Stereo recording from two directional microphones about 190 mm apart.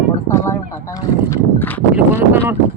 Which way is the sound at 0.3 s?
15° left (ahead or behind).